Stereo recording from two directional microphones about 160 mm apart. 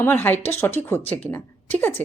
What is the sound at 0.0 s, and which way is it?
A woman's voice, 10° left (ahead or behind).